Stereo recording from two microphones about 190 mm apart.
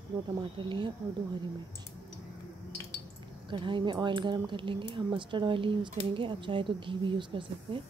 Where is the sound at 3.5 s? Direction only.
25° right (ahead or behind).